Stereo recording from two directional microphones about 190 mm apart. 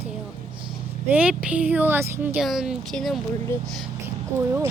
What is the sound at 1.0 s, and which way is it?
Speech, 5° right (ahead or behind).